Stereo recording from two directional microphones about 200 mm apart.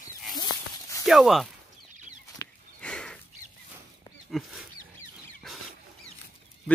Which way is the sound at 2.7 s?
5° left (ahead or behind).